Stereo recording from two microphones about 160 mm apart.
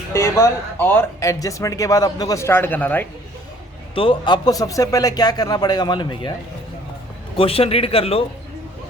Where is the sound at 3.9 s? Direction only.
30° left (ahead or behind).